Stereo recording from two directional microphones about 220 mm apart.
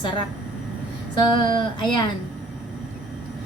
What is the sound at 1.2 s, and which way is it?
Speech, 20° left (ahead or behind).